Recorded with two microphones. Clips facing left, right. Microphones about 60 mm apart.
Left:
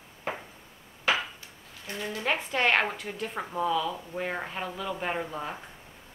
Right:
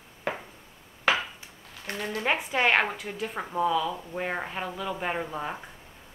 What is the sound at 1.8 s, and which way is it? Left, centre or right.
Speech, right.